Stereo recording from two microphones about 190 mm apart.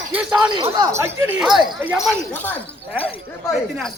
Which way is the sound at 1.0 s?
5° right (ahead or behind).